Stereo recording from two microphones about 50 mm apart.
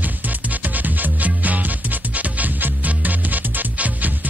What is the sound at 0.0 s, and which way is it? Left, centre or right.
Music, right.